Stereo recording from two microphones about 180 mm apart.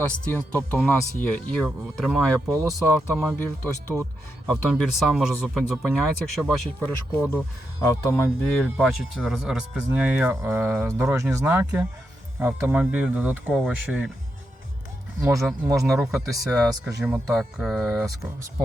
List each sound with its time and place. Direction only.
0.0 s speech: 10° left (ahead or behind)
7.8 s speech: 15° left (ahead or behind)
8.5 s speech: centre (ahead or behind)
15.2 s speech: 15° right (ahead or behind)
15.9 s speech: centre (ahead or behind)